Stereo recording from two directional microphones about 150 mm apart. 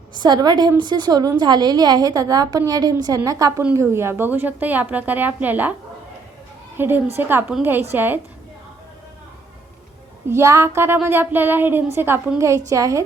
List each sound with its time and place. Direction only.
0.2 s a woman's voice: 25° right (ahead or behind); by 5.7 s 10° right (ahead or behind)
6.7 s a woman's voice: 15° right (ahead or behind)
10.2 s a woman's voice: 15° right (ahead or behind)